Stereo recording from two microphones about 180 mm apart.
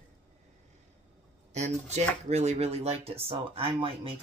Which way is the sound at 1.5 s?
40° right (ahead or behind).